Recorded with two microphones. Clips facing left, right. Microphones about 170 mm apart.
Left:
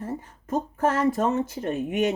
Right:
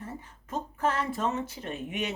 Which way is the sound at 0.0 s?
45° left (ahead or behind).